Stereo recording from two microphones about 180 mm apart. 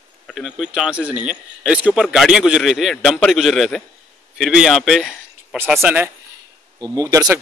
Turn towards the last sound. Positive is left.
turn(degrees=-20)  # may be behind; listen again after turning